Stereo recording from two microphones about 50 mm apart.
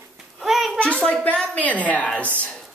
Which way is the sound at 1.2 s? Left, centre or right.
Left.